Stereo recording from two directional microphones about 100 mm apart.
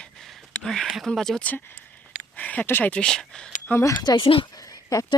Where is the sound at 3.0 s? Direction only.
5° left (ahead or behind).